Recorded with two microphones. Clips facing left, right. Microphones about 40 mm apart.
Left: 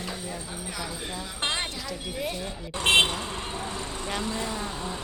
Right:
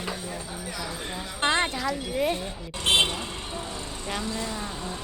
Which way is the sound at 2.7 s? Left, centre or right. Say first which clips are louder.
Left 2 dB; left.